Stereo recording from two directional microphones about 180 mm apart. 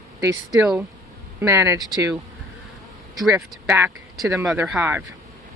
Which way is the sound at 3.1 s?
Centre (ahead or behind).